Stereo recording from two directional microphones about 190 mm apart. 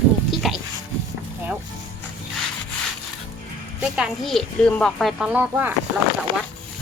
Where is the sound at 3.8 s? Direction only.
Centre (ahead or behind).